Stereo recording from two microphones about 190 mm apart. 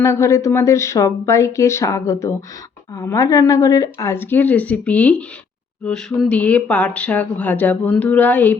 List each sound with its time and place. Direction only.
0.0 s speech: 15° left (ahead or behind)